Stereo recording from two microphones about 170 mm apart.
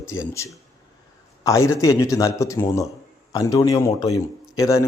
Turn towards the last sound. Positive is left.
turn(degrees=20)  # may be behind; listen again after turning